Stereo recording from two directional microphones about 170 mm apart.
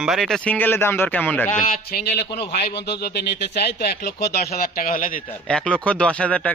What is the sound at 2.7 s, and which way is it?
Speech, 85° left.